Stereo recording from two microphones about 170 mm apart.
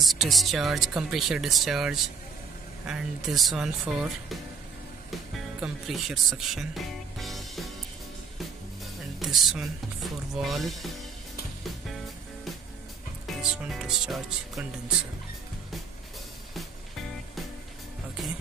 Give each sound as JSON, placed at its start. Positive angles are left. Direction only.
{"t": 0.0, "sound": "speech", "side_deg": 0}
{"t": 5.6, "sound": "speech", "side_deg": -5}
{"t": 9.2, "sound": "speech", "side_deg": 0}
{"t": 13.3, "sound": "speech", "side_deg": 0}